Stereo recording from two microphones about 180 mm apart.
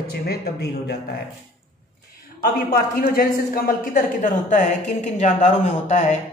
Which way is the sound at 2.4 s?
50° left (ahead or behind).